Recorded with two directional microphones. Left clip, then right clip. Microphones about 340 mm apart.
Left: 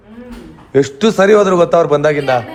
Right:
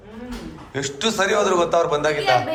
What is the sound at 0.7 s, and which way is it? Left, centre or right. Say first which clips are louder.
A man's voice: left 10 dB; left.